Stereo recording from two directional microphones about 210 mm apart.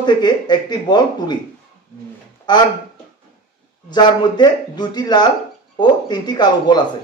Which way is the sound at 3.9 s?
20° left (ahead or behind).